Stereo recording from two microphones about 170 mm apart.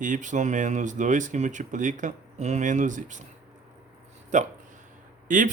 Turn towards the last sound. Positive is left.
turn(degrees=-50)  # may be behind; listen again after turning